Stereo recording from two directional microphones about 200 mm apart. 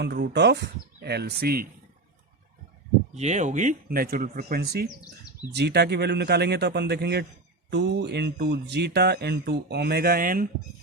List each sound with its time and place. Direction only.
0.0 s speech: 55° right (ahead or behind)
3.2 s speech: 35° right (ahead or behind)